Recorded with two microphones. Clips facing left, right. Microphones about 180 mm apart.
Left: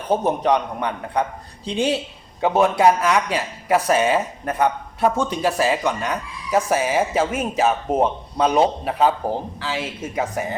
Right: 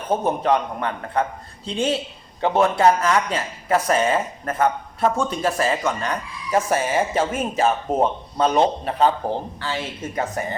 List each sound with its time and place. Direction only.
0.8 s speech: 15° left (ahead or behind)
2.4 s a man's voice: 5° left (ahead or behind)